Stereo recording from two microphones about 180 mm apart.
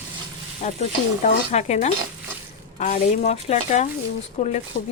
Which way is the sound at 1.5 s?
40° left (ahead or behind).